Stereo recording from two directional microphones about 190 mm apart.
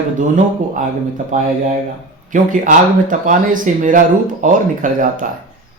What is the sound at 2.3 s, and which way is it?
Speech, 45° right (ahead or behind).